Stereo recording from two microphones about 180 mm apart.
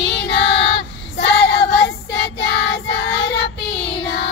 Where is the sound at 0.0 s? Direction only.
75° left (ahead or behind).